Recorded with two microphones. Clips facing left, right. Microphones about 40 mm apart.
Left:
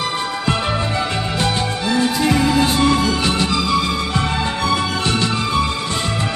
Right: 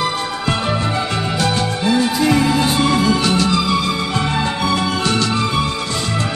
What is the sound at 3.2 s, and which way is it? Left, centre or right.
Music, left.